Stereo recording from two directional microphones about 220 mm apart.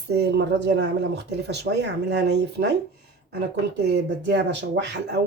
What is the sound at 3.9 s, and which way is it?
Speech, 50° right (ahead or behind).